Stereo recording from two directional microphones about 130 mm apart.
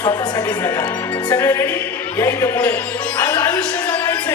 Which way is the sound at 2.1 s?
20° left (ahead or behind).